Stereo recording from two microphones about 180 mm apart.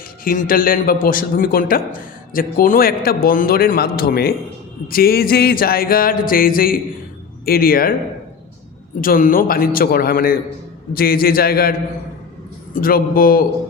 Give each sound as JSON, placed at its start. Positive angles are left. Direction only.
{"t": 0.3, "sound": "a man's voice", "side_deg": 50}
{"t": 4.9, "sound": "music", "side_deg": 55}
{"t": 7.4, "sound": "a man's voice", "side_deg": 55}
{"t": 9.0, "sound": "a man's voice", "side_deg": 50}
{"t": 10.9, "sound": "music", "side_deg": 55}
{"t": 12.7, "sound": "a man's voice", "side_deg": 50}